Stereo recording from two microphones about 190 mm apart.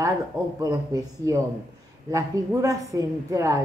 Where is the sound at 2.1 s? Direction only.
15° right (ahead or behind).